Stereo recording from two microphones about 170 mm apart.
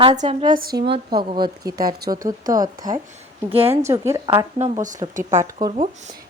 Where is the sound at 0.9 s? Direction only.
30° right (ahead or behind).